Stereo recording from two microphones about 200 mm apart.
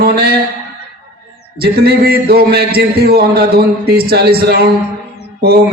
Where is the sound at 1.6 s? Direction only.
50° right (ahead or behind).